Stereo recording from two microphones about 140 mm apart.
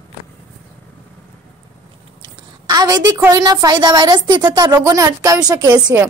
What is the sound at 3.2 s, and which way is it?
Speech, 25° right (ahead or behind).